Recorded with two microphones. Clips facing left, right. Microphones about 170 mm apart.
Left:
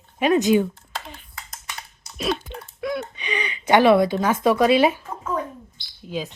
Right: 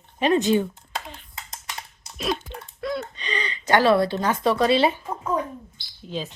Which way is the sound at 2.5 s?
15° left (ahead or behind).